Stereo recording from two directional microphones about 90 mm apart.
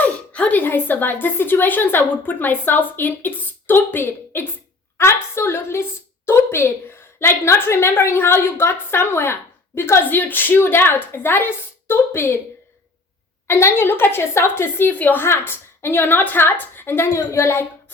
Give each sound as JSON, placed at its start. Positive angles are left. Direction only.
{"t": 0.0, "sound": "a woman's voice", "side_deg": 15}
{"t": 13.5, "sound": "a woman's voice", "side_deg": 30}